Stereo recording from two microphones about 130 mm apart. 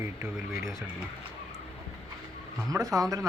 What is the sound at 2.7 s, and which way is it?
Speech, 25° right (ahead or behind).